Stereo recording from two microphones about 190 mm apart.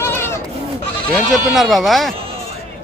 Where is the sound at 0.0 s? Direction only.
10° left (ahead or behind).